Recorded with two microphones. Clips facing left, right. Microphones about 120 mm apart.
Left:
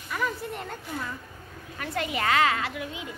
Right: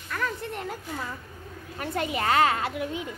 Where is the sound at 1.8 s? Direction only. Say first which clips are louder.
Right 1 dB; 40° right (ahead or behind).